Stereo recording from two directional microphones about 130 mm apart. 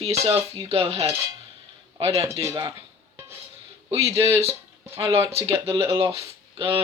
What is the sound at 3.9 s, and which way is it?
Speech, 20° right (ahead or behind).